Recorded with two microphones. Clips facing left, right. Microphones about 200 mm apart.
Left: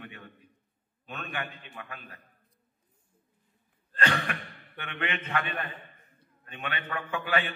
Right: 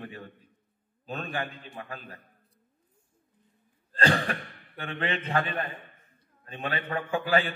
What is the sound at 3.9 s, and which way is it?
A man's voice, 30° right (ahead or behind).